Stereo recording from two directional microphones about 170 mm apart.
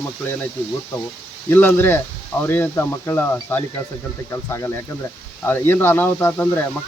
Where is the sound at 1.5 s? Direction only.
15° left (ahead or behind).